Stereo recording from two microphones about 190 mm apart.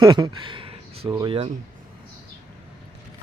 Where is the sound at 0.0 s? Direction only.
20° right (ahead or behind).